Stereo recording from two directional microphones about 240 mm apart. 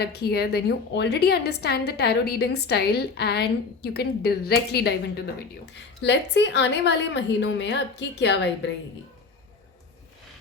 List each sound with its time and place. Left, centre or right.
0.0 s a woman's voice: left